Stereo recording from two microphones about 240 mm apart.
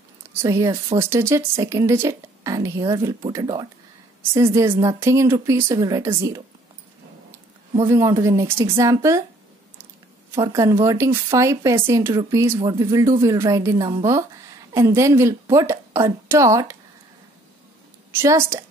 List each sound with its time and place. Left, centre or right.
0.4 s speech: centre
7.8 s speech: centre
10.3 s speech: centre
18.1 s speech: centre